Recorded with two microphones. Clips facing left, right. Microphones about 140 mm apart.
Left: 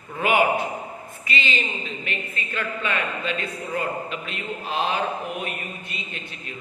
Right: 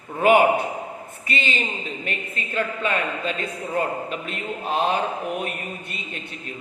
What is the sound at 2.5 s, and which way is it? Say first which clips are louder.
Speech: right 3 dB; 40° right (ahead or behind).